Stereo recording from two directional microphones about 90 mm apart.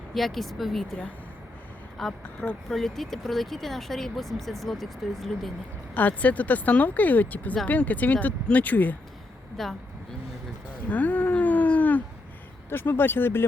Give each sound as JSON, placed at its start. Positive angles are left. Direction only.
{"t": 0.1, "sound": "speech", "side_deg": 0}
{"t": 2.0, "sound": "speech", "side_deg": 0}
{"t": 5.9, "sound": "speech", "side_deg": 15}
{"t": 9.6, "sound": "speech", "side_deg": 5}
{"t": 10.8, "sound": "a sound", "side_deg": 15}
{"t": 12.7, "sound": "speech", "side_deg": 25}